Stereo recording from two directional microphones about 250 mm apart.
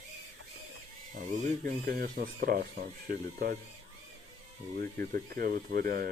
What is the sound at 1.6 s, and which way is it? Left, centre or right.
Speech, right.